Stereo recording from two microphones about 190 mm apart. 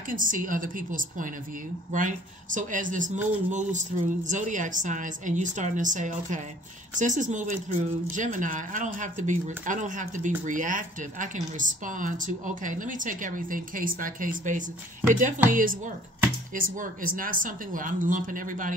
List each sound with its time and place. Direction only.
0.1 s speech: 45° right (ahead or behind)